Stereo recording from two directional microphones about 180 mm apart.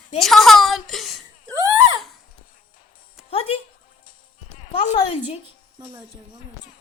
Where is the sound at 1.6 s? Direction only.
20° right (ahead or behind).